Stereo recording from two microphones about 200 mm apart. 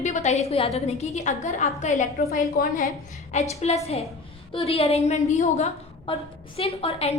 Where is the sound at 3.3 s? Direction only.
35° left (ahead or behind).